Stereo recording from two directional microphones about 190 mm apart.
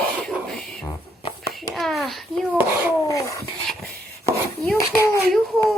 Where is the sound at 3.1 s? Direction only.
15° left (ahead or behind).